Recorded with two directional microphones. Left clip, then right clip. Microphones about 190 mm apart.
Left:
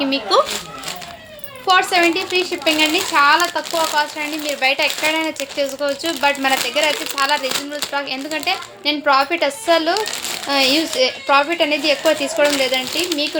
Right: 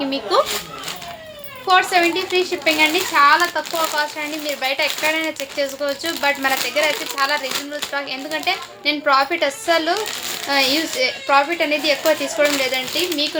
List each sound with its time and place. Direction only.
0.0 s speech: 20° left (ahead or behind)
1.6 s speech: 25° left (ahead or behind)